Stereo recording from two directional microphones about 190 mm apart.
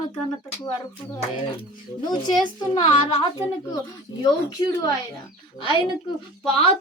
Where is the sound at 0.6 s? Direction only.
20° left (ahead or behind).